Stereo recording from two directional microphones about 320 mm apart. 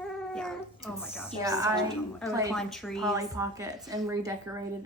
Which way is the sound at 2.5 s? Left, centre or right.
Centre.